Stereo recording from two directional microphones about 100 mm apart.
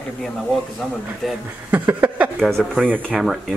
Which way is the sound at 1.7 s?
20° right (ahead or behind).